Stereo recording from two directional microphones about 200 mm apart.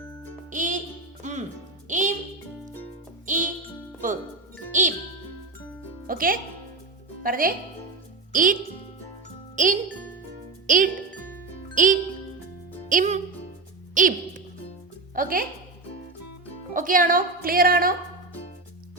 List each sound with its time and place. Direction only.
0.5 s music: 40° right (ahead or behind)
3.2 s music: 40° right (ahead or behind)
4.7 s music: 40° right (ahead or behind)
6.1 s music: 45° right (ahead or behind)
8.3 s speech: 40° right (ahead or behind)
10.7 s music: 40° right (ahead or behind)
13.9 s a sound: 40° right (ahead or behind)
15.1 s music: 45° right (ahead or behind)
16.7 s a sound: 45° right (ahead or behind)